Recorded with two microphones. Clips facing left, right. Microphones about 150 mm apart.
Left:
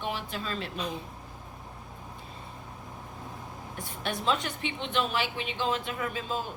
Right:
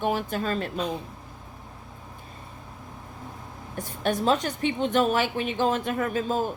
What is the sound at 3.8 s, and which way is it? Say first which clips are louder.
A woman's voice: right 8 dB; 45° right (ahead or behind).